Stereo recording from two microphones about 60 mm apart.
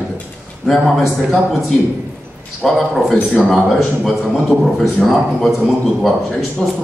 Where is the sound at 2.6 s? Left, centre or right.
Centre.